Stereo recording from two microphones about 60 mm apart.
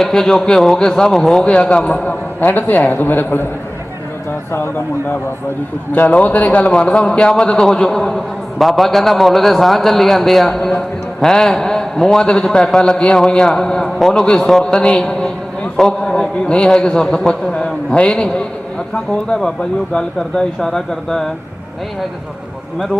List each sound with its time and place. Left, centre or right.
0.0 s a man's voice: centre
2.4 s a man's voice: left
5.9 s a man's voice: left; by 21.2 s centre